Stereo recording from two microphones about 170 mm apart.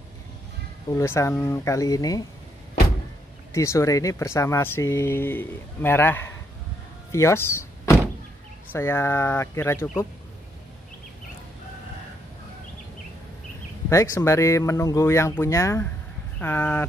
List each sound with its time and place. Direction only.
0.8 s speech: 15° left (ahead or behind)
3.5 s speech: 15° left (ahead or behind)
7.1 s door: 15° left (ahead or behind)
8.7 s speech: 15° left (ahead or behind)
13.8 s speech: 15° left (ahead or behind)